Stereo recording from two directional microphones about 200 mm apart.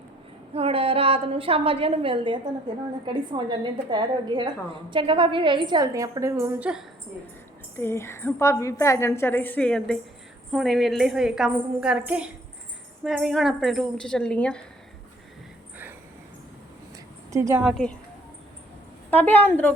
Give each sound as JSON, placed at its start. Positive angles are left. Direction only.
{"t": 0.5, "sound": "a woman's voice", "side_deg": -30}
{"t": 7.8, "sound": "a woman's voice", "side_deg": 10}
{"t": 17.3, "sound": "a woman's voice", "side_deg": -15}
{"t": 17.6, "sound": "a woman's voice", "side_deg": 0}
{"t": 19.1, "sound": "a woman's voice", "side_deg": 10}